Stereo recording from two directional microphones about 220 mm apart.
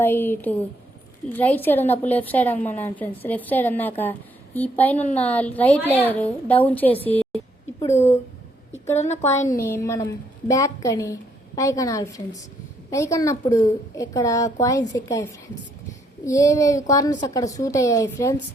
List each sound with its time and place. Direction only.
0.0 s a woman's voice: 10° left (ahead or behind)
9.0 s a woman's voice: 30° left (ahead or behind)
9.5 s a woman's voice: 15° left (ahead or behind)